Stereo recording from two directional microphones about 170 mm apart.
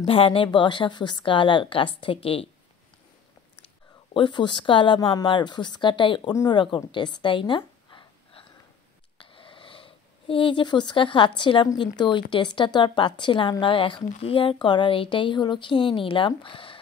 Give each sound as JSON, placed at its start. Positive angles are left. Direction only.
{"t": 0.0, "sound": "a woman's voice", "side_deg": 35}
{"t": 4.1, "sound": "a woman's voice", "side_deg": 30}
{"t": 9.2, "sound": "a sound", "side_deg": 30}
{"t": 12.0, "sound": "a woman's voice", "side_deg": 30}